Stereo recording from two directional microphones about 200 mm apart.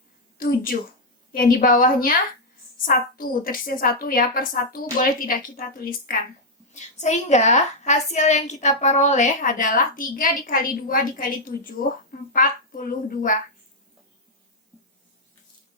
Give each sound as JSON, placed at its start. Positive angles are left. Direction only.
{"t": 0.3, "sound": "a woman's voice", "side_deg": 45}
{"t": 6.7, "sound": "a woman's voice", "side_deg": 35}